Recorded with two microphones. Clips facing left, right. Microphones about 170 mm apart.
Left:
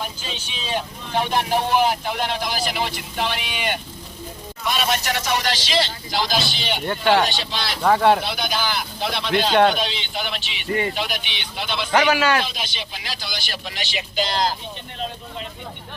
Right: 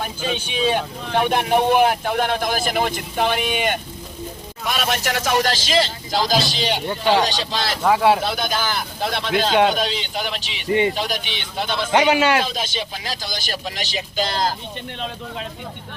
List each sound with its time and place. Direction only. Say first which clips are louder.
0.2 s a man's voice: right 11 dB; 55° right (ahead or behind)
7.9 s speech: even; 5° right (ahead or behind)
8.2 s speech: right 2 dB; 45° right (ahead or behind)
9.5 s a man's voice: left 1 dB; 5° right (ahead or behind)
9.7 s a man's voice: right 2 dB; 40° right (ahead or behind)
10.7 s speech: right 5 dB; 20° right (ahead or behind)
10.9 s speech: right 2 dB; 40° right (ahead or behind)
11.9 s speech: right 2 dB; 25° right (ahead or behind)
12.5 s speech: right 5 dB; 45° right (ahead or behind)